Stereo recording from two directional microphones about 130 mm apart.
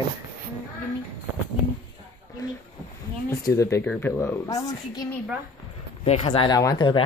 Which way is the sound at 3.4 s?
25° left (ahead or behind).